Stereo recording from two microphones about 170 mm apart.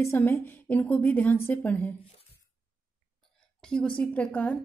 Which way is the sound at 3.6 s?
5° left (ahead or behind).